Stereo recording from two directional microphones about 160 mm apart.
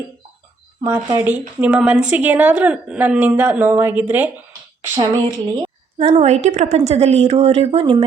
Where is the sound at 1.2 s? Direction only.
10° right (ahead or behind).